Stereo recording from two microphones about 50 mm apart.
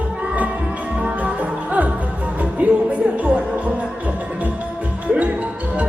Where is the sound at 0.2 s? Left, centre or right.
Right.